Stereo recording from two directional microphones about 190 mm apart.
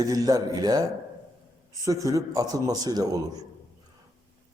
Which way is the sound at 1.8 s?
15° right (ahead or behind).